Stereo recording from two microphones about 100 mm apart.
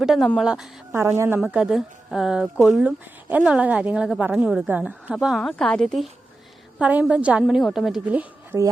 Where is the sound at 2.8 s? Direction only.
15° right (ahead or behind).